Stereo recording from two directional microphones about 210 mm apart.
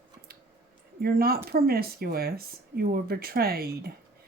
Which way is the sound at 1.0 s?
45° right (ahead or behind).